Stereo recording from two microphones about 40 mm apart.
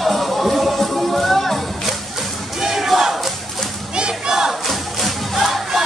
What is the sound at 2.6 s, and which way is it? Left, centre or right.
Battle cry, centre.